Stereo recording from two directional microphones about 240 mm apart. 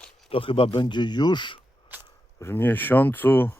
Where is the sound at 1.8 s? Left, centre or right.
Centre.